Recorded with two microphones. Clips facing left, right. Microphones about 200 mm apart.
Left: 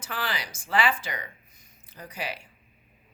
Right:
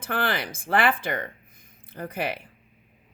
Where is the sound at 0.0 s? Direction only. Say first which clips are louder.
Right 6 dB; 55° right (ahead or behind).